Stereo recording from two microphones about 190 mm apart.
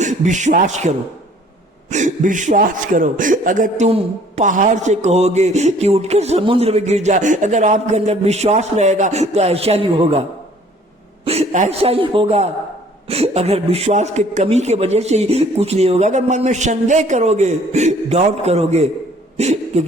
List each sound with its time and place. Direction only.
0.0 s a man's voice: 40° right (ahead or behind)
11.3 s a man's voice: 35° right (ahead or behind)